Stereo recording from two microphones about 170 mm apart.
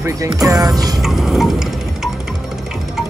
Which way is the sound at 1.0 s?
Centre (ahead or behind).